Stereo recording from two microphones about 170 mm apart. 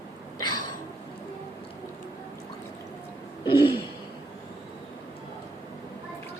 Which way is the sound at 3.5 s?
30° left (ahead or behind).